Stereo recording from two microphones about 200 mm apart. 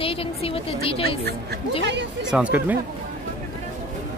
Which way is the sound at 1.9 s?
60° right (ahead or behind).